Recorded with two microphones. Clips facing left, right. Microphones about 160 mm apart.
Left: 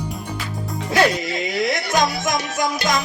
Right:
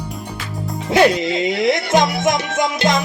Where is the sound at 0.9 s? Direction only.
25° right (ahead or behind).